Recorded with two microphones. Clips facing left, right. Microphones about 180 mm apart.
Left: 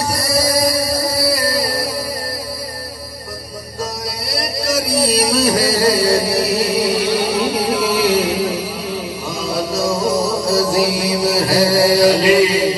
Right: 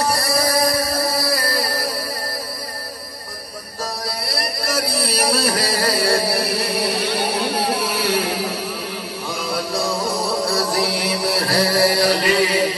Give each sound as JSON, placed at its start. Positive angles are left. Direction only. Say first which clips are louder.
{"t": 0.1, "sound": "music", "louder": "left 2 dB", "side_deg": 25}
{"t": 4.9, "sound": "music", "louder": "left 7 dB", "side_deg": 25}
{"t": 7.7, "sound": "music", "louder": "left 6 dB", "side_deg": -25}
{"t": 8.0, "sound": "music", "louder": "left 5 dB", "side_deg": 25}
{"t": 9.5, "sound": "music", "louder": "left 4 dB", "side_deg": 25}
{"t": 11.1, "sound": "mantra", "louder": "left 5 dB", "side_deg": 25}